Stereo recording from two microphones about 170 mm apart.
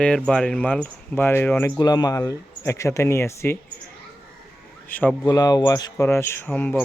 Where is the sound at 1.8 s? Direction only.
20° left (ahead or behind).